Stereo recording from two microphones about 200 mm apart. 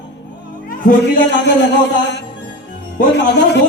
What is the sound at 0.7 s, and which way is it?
Speech, 45° left (ahead or behind).